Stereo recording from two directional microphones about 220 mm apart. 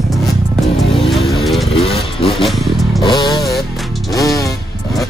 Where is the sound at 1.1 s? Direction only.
Centre (ahead or behind).